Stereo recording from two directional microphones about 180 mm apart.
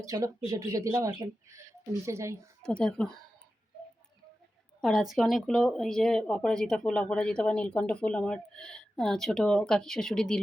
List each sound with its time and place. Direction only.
0.0 s speech: 20° right (ahead or behind)
2.6 s speech: 5° left (ahead or behind)
4.8 s speech: centre (ahead or behind)